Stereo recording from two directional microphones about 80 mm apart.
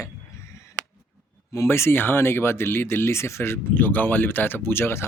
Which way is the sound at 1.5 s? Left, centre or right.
Left.